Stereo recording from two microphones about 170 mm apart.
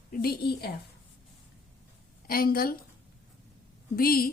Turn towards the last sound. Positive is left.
turn(degrees=60)  # may be behind; listen again after turning